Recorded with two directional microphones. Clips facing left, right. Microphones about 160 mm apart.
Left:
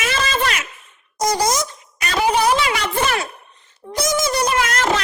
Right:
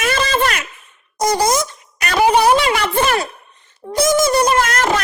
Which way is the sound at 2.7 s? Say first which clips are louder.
Right 4 dB; 50° right (ahead or behind).